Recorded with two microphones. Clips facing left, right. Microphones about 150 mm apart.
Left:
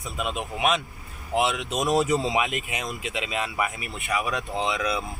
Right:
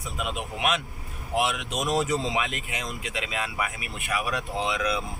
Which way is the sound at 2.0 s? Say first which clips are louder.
Left 3 dB; 20° left (ahead or behind).